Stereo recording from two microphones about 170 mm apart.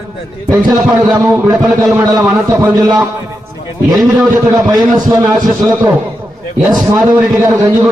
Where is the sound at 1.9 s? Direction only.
10° right (ahead or behind).